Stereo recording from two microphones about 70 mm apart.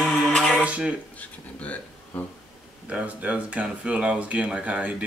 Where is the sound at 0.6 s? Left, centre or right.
Centre.